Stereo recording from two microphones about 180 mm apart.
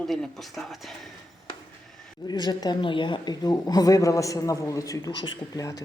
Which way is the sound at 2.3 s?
25° left (ahead or behind).